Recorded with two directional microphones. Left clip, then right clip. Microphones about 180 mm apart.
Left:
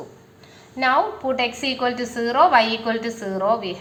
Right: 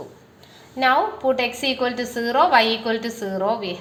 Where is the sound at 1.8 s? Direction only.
40° right (ahead or behind).